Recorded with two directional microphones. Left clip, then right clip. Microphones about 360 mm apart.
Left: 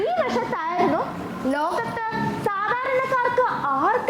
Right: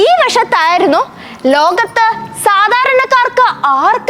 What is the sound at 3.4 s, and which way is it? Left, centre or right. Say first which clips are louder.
Speech: right 12 dB; centre.